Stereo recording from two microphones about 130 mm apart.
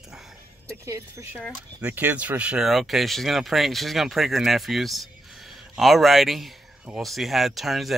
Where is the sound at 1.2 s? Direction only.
20° right (ahead or behind).